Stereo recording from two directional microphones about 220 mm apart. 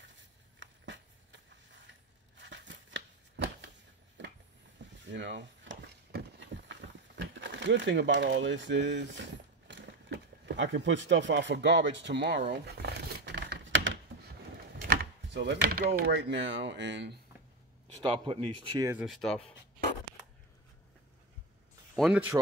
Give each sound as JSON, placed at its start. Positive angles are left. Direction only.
{"t": 0.0, "sound": "a sound", "side_deg": -55}
{"t": 4.8, "sound": "a sound", "side_deg": -55}
{"t": 14.9, "sound": "speech", "side_deg": -50}
{"t": 18.0, "sound": "speech", "side_deg": -25}
{"t": 18.9, "sound": "speech", "side_deg": 0}
{"t": 21.9, "sound": "speech", "side_deg": -5}